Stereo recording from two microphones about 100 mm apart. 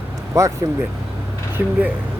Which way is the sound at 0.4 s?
35° right (ahead or behind).